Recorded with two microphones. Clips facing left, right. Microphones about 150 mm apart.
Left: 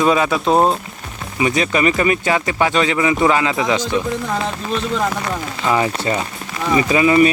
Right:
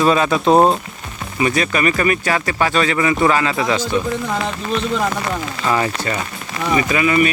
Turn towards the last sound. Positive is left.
turn(degrees=30)  # may be behind; listen again after turning